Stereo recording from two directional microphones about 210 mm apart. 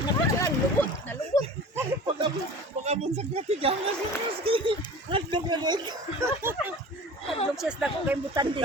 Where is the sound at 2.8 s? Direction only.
30° right (ahead or behind).